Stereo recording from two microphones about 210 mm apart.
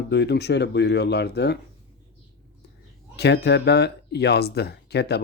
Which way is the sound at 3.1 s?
50° left (ahead or behind).